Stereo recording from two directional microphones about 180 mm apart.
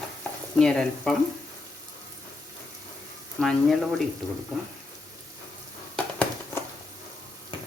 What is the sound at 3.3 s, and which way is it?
Speech, centre (ahead or behind).